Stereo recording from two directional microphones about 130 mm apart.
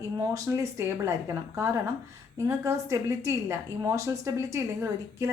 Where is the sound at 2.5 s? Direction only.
20° right (ahead or behind).